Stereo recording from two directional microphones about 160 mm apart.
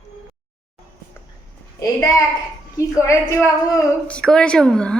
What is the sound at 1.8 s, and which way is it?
A woman's voice, 20° left (ahead or behind).